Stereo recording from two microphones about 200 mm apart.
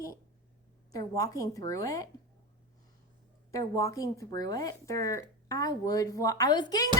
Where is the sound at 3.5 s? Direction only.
15° left (ahead or behind).